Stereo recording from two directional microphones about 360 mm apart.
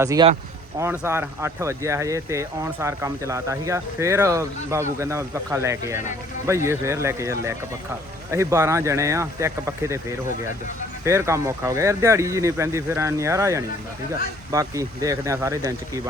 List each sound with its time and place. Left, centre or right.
0.0 s speech: centre